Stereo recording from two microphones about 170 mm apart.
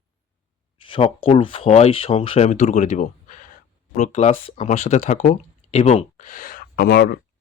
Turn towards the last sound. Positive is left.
turn(degrees=70)  # may be behind; listen again after turning